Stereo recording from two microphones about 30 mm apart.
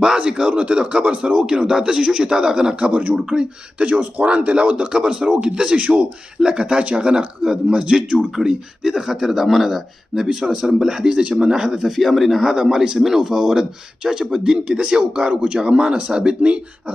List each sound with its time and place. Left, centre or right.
0.2 s speech: right
1.4 s speech: right
2.7 s a man's voice: right
5.8 s speech: right
6.4 s speech: right
6.8 s a man's voice: right
8.8 s speech: centre
10.1 s speech: centre
11.1 s speech: right
11.8 s speech: centre
12.4 s speech: centre
14.6 s speech: right
14.9 s speech: right